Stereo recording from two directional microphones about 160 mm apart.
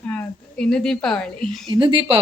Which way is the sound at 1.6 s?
30° right (ahead or behind).